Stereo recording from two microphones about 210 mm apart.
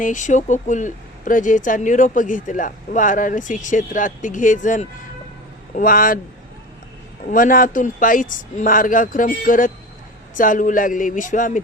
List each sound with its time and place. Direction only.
0.0 s speech: 35° left (ahead or behind)
7.3 s speech: 40° left (ahead or behind)